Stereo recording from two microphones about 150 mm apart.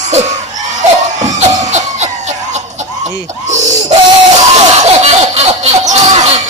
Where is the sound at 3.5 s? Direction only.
50° right (ahead or behind).